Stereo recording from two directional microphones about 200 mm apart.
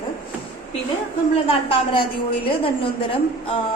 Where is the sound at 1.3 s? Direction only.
25° left (ahead or behind).